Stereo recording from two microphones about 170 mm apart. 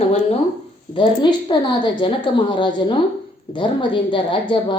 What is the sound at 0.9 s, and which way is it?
A woman's voice, 30° left (ahead or behind).